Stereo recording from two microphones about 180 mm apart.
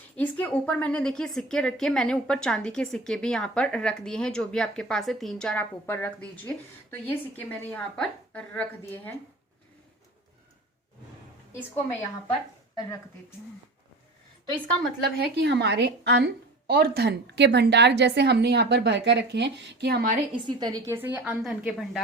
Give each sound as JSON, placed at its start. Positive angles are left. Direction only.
{"t": 0.2, "sound": "a woman's voice", "side_deg": 10}
{"t": 15.0, "sound": "a woman's voice", "side_deg": -65}
{"t": 20.3, "sound": "speech", "side_deg": -25}